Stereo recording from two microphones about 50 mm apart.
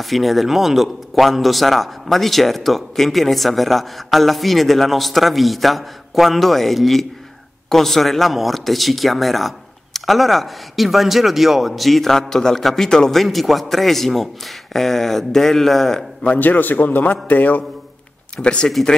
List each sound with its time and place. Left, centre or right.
0.0 s a man's voice: centre
16.3 s a man's voice: left
18.3 s speech: centre